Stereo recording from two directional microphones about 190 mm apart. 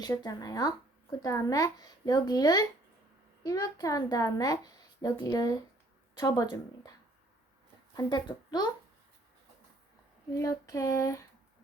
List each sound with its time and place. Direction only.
0.0 s a woman's voice: 20° left (ahead or behind)
7.9 s a woman's voice: 20° left (ahead or behind)
10.3 s female singing: 15° left (ahead or behind)